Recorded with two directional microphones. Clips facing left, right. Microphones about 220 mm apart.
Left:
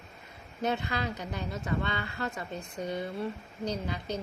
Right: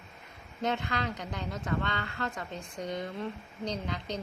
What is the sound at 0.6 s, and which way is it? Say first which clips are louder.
A woman's voice: left 1 dB; 10° left (ahead or behind).